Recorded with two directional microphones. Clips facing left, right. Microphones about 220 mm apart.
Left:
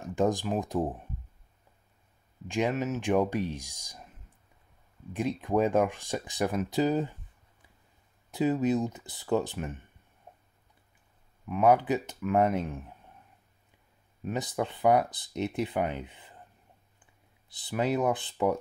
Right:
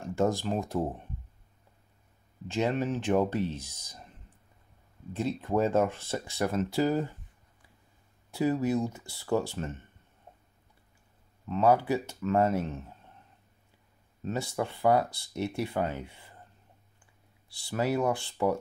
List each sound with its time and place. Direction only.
0.0 s speech: 15° left (ahead or behind)
2.4 s speech: 15° left (ahead or behind)
5.1 s speech: 15° left (ahead or behind)
8.3 s speech: 20° left (ahead or behind)
11.4 s speech: 15° left (ahead or behind)
14.2 s speech: 20° left (ahead or behind)